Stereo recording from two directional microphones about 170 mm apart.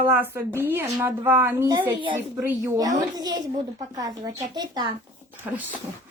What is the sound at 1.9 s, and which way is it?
A child's voice, 30° right (ahead or behind).